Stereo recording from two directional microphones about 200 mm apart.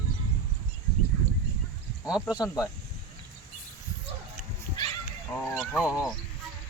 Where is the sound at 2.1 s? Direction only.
5° right (ahead or behind).